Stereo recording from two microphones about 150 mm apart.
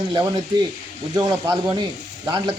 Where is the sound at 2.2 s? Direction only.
30° right (ahead or behind).